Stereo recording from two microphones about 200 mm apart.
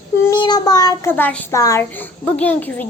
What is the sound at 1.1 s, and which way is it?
A woman's voice, 10° left (ahead or behind).